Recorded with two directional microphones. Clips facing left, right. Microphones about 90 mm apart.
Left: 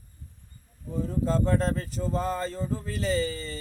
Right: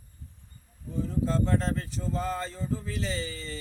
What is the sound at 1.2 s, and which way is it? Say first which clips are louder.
Speech: left 2 dB; 45° left (ahead or behind).